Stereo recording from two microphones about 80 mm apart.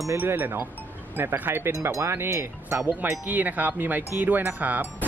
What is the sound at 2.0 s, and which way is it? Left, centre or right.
Speech, right.